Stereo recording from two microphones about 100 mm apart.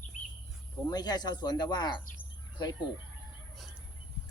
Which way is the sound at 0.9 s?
40° left (ahead or behind).